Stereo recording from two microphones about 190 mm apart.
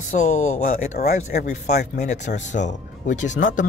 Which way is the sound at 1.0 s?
55° left (ahead or behind).